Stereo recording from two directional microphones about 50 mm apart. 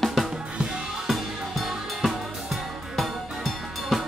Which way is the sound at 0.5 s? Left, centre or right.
Centre.